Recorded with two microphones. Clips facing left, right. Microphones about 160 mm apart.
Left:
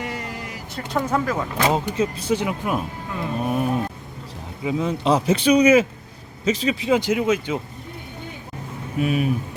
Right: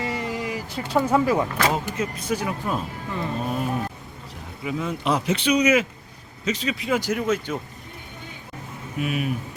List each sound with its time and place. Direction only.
0.2 s a sound: centre (ahead or behind)
0.9 s speech: 10° right (ahead or behind)
1.7 s speech: 30° left (ahead or behind)
2.6 s speech: 10° left (ahead or behind)
4.6 s speech: 25° left (ahead or behind)
9.0 s speech: 35° left (ahead or behind)